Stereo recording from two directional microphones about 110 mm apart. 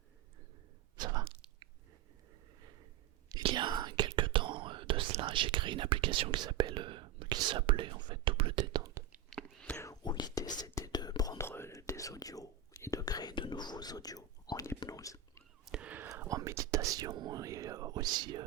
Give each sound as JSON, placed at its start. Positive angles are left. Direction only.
{"t": 3.5, "sound": "whispering", "side_deg": -40}
{"t": 6.4, "sound": "speech", "side_deg": -45}
{"t": 6.7, "sound": "whispering", "side_deg": -50}
{"t": 9.3, "sound": "whispering", "side_deg": 5}
{"t": 9.7, "sound": "whispering", "side_deg": 30}
{"t": 10.0, "sound": "whispering", "side_deg": 40}
{"t": 11.4, "sound": "whispering", "side_deg": 20}
{"t": 15.6, "sound": "whispering", "side_deg": -10}
{"t": 16.0, "sound": "whispering", "side_deg": -25}